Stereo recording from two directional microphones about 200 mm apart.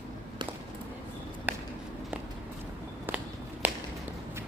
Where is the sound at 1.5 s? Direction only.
10° right (ahead or behind).